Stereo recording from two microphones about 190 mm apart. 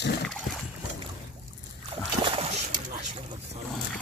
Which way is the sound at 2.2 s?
30° right (ahead or behind).